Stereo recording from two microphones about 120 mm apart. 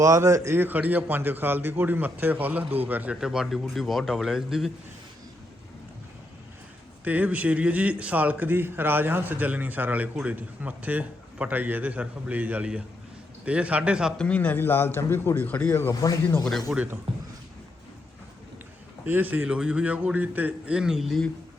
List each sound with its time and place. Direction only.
0.0 s a man's voice: 25° right (ahead or behind); by 4.7 s 5° right (ahead or behind)
7.0 s a man's voice: 15° right (ahead or behind)
14.2 s a man's voice: 10° left (ahead or behind)
16.4 s speech: 5° left (ahead or behind)
16.7 s a man's voice: 15° right (ahead or behind)
19.0 s a man's voice: 15° right (ahead or behind); by 21.2 s centre (ahead or behind)